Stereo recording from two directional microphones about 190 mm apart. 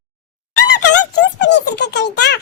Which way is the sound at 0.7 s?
65° left (ahead or behind).